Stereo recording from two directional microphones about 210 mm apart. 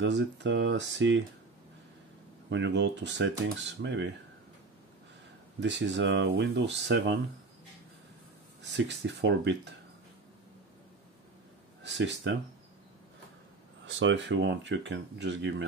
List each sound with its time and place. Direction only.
0.0 s speech: 55° right (ahead or behind)
2.5 s speech: 55° right (ahead or behind)
5.6 s speech: 60° right (ahead or behind)
8.7 s speech: 55° right (ahead or behind)
11.8 s speech: 60° right (ahead or behind)
13.8 s speech: 65° right (ahead or behind)